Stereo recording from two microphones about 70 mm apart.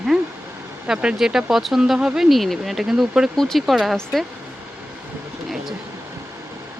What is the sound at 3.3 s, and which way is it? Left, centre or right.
Speech, centre.